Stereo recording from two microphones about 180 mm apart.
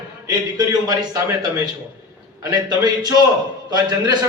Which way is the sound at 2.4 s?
20° right (ahead or behind).